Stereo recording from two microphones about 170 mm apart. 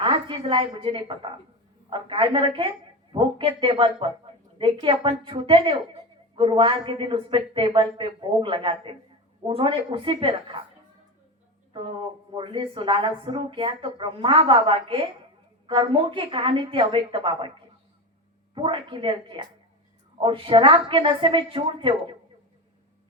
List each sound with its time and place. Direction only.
0.0 s a woman's voice: 30° right (ahead or behind)
12.3 s a woman's voice: 30° right (ahead or behind)
18.5 s speech: 30° right (ahead or behind)